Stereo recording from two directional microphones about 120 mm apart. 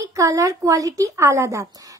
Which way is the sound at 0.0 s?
25° right (ahead or behind).